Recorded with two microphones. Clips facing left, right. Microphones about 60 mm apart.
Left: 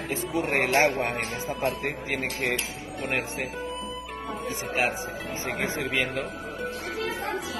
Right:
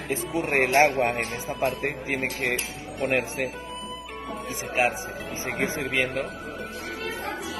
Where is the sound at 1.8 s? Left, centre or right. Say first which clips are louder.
Right 2 dB; centre.